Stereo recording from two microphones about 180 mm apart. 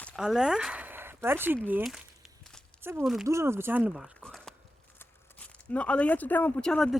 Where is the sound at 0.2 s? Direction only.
5° right (ahead or behind).